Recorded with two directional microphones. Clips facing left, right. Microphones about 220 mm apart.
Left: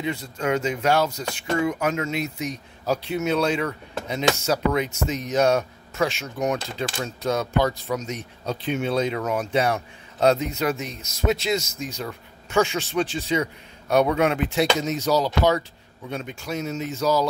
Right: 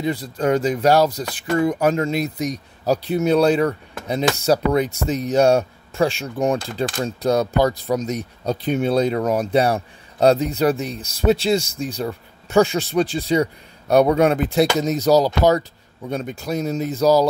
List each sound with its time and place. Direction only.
0.0 s speech: 35° right (ahead or behind)